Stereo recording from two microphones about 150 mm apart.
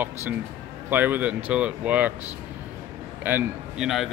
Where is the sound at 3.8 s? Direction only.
Centre (ahead or behind).